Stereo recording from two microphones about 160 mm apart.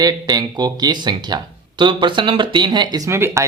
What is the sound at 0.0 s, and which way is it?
Speech, 25° right (ahead or behind).